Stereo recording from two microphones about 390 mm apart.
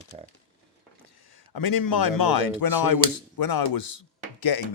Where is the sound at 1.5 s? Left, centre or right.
Left.